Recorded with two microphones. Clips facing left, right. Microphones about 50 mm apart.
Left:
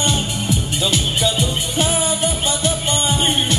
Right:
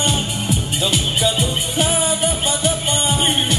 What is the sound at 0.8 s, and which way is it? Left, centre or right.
Music, centre.